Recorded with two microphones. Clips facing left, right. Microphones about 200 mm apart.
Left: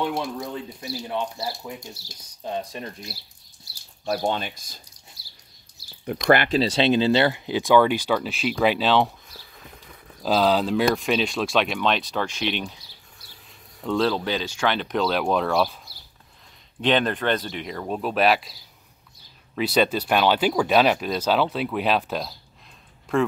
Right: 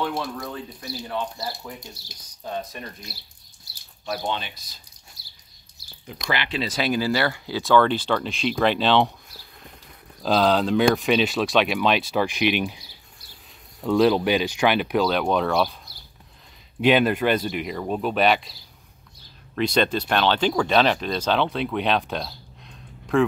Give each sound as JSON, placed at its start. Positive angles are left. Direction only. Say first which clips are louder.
{"t": 0.0, "sound": "speech", "louder": "left 1 dB", "side_deg": 15}
{"t": 4.0, "sound": "speech", "louder": "left 4 dB", "side_deg": 45}
{"t": 5.2, "sound": "a sound", "louder": "left 1 dB", "side_deg": -20}
{"t": 6.2, "sound": "speech", "louder": "left 9 dB", "side_deg": 50}
{"t": 6.6, "sound": "speech", "louder": "left 4 dB", "side_deg": 25}
{"t": 10.2, "sound": "speech", "louder": "right 1 dB", "side_deg": 5}
{"t": 13.8, "sound": "speech", "louder": "right 4 dB", "side_deg": -15}
{"t": 19.5, "sound": "speech", "louder": "even", "side_deg": 5}